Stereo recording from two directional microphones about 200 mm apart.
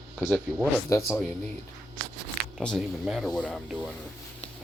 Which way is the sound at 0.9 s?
15° left (ahead or behind).